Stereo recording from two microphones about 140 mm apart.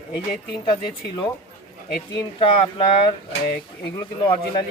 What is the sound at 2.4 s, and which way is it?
Speech, 40° left (ahead or behind).